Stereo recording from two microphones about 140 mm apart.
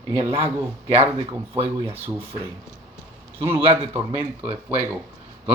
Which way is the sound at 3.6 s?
40° right (ahead or behind).